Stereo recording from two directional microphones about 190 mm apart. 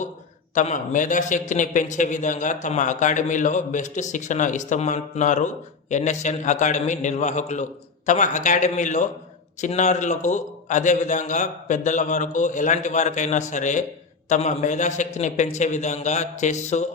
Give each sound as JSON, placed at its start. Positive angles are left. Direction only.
{"t": 0.5, "sound": "a man's voice", "side_deg": 40}